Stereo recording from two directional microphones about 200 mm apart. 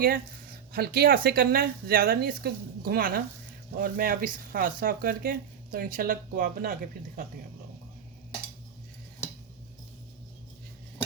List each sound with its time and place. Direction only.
0.7 s speech: 50° right (ahead or behind)